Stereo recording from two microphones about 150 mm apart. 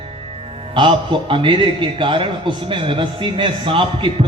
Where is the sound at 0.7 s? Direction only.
35° right (ahead or behind).